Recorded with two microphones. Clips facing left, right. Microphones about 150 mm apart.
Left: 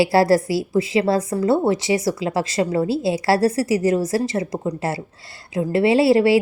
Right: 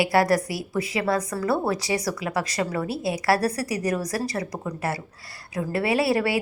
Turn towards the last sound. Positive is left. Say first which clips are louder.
# left 8 dB
turn(degrees=25)  # may be behind; listen again after turning